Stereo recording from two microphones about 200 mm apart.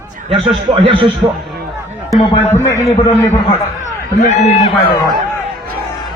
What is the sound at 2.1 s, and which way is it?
Speech, 25° left (ahead or behind).